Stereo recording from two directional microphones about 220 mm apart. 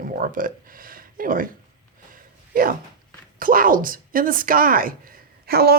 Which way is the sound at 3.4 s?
40° right (ahead or behind).